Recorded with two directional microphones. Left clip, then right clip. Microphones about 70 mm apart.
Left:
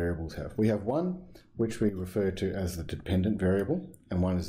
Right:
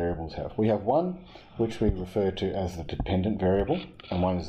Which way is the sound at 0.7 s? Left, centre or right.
Left.